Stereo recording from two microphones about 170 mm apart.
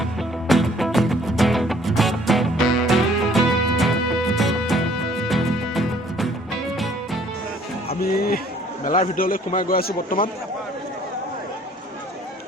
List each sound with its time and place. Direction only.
0.0 s music: centre (ahead or behind)
8.0 s a sound: 65° left (ahead or behind)
8.8 s a man's voice: 55° left (ahead or behind)